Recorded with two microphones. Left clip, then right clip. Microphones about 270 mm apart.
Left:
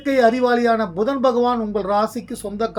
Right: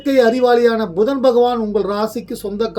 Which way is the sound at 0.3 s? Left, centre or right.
Centre.